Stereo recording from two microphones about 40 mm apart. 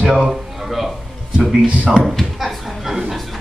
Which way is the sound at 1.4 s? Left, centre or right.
Centre.